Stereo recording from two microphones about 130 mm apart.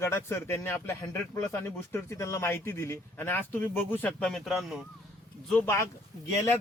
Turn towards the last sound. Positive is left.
turn(degrees=20)  # may be behind; listen again after turning